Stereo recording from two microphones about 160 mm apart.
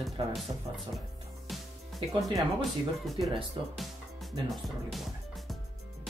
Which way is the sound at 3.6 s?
35° right (ahead or behind).